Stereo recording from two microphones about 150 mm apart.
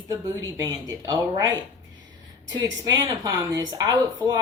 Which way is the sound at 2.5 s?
25° right (ahead or behind).